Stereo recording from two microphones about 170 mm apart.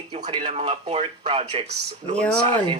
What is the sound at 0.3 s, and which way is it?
Speech, 35° right (ahead or behind).